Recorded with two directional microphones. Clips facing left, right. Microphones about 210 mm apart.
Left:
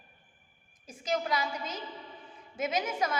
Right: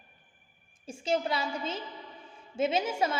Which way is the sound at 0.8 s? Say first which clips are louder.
Right 3 dB; 30° right (ahead or behind).